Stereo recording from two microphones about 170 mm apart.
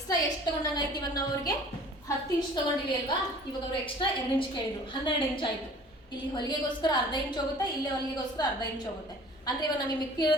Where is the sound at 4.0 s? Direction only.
30° left (ahead or behind).